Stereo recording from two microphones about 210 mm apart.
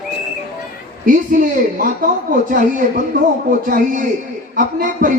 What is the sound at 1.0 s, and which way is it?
Speech, 40° right (ahead or behind).